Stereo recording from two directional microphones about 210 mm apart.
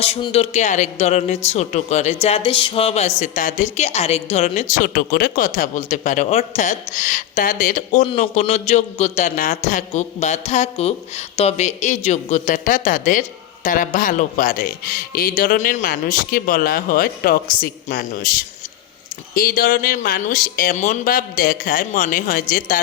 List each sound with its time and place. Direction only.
0.0 s a woman's voice: 30° left (ahead or behind)